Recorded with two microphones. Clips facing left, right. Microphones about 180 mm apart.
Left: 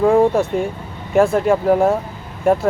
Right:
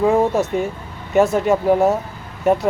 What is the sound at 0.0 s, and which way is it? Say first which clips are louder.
Speech: left 2 dB; 5° right (ahead or behind).